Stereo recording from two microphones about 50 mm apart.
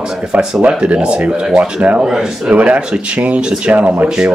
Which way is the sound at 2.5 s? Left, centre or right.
Right.